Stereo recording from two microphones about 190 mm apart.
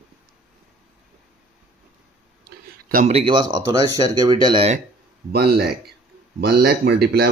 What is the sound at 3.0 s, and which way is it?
Speech, 30° right (ahead or behind).